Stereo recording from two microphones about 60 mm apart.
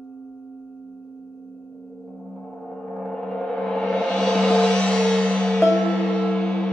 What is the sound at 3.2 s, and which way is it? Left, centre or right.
Music, centre.